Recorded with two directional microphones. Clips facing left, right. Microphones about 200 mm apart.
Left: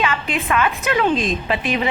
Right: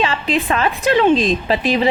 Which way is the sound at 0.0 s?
35° right (ahead or behind).